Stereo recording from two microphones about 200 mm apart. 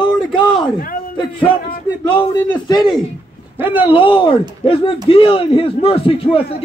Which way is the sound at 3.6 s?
10° right (ahead or behind).